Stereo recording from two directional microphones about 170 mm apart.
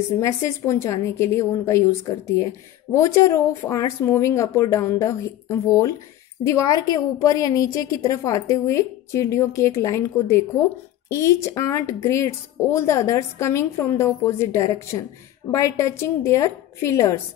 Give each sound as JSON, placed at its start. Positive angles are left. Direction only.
{"t": 0.2, "sound": "a woman's voice", "side_deg": 15}